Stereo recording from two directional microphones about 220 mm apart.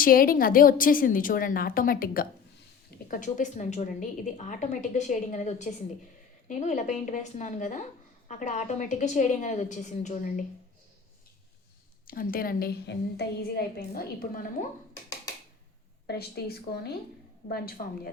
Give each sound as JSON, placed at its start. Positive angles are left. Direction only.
{"t": 0.0, "sound": "a woman's voice", "side_deg": 40}
{"t": 12.0, "sound": "a woman's voice", "side_deg": 40}
{"t": 16.0, "sound": "a woman's voice", "side_deg": 45}